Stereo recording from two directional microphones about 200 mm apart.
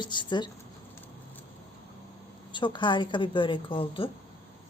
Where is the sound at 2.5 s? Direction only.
25° left (ahead or behind).